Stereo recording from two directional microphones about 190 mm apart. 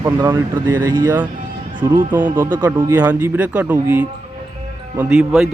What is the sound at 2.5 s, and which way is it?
Speech, 20° right (ahead or behind).